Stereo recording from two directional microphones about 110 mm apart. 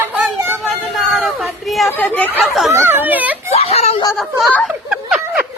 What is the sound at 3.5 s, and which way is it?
Speech, 65° left (ahead or behind).